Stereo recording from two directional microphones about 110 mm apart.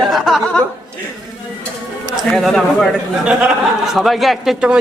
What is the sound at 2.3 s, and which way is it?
A man's voice, centre (ahead or behind).